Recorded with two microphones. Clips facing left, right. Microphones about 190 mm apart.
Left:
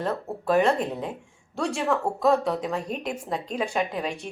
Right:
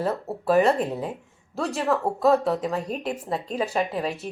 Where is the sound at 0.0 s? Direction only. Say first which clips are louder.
Right 2 dB; 5° right (ahead or behind).